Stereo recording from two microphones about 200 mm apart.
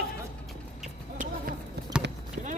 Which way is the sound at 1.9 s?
5° right (ahead or behind).